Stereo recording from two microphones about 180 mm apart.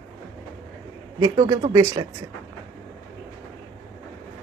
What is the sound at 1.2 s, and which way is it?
Speech, 20° right (ahead or behind).